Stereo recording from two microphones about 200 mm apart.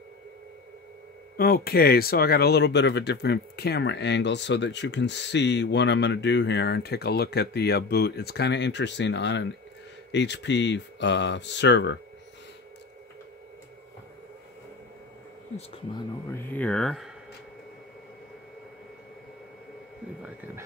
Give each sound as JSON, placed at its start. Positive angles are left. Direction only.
{"t": 1.3, "sound": "speech", "side_deg": 50}
{"t": 16.3, "sound": "speech", "side_deg": 10}